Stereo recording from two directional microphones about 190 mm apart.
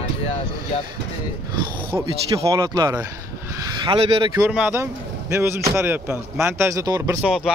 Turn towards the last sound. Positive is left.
turn(degrees=-5)  # may be behind; listen again after turning